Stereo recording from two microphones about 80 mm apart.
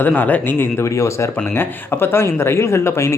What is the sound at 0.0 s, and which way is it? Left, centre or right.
Speech, left.